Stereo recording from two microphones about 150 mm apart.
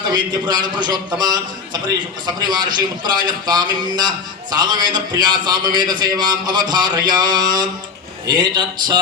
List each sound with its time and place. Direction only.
0.1 s a man's voice: 30° right (ahead or behind)